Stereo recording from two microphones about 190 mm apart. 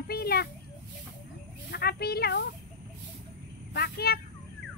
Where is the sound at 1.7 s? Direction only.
55° left (ahead or behind).